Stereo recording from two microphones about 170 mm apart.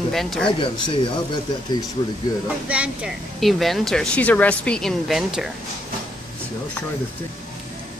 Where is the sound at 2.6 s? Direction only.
5° right (ahead or behind).